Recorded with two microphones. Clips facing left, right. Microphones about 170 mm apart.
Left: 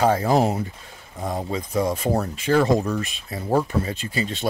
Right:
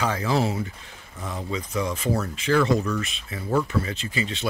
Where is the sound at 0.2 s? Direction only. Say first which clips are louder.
Left 4 dB; 45° left (ahead or behind).